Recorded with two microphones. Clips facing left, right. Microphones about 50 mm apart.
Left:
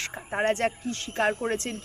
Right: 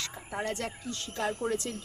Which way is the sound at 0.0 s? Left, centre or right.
Left.